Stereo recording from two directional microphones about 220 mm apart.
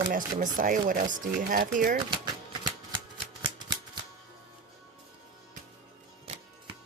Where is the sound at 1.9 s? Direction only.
20° right (ahead or behind).